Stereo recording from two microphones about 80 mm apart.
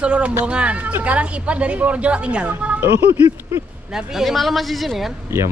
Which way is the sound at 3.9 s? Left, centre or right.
Centre.